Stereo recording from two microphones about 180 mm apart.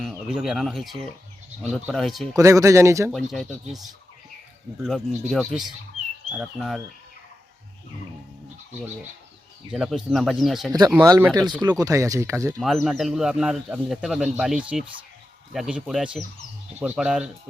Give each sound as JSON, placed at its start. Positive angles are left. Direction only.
{"t": 0.0, "sound": "speech", "side_deg": 0}
{"t": 2.3, "sound": "speech", "side_deg": -15}
{"t": 3.1, "sound": "speech", "side_deg": 0}
{"t": 9.7, "sound": "speech", "side_deg": 0}
{"t": 10.7, "sound": "speech", "side_deg": -20}
{"t": 12.6, "sound": "speech", "side_deg": 0}